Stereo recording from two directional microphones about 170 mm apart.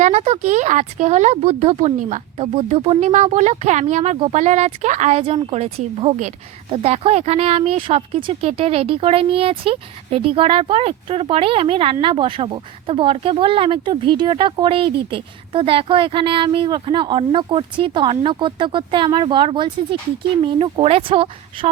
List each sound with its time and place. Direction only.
0.0 s speech: 35° right (ahead or behind)